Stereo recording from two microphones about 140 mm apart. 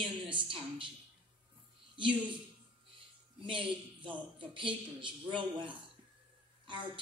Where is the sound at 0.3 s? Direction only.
35° right (ahead or behind).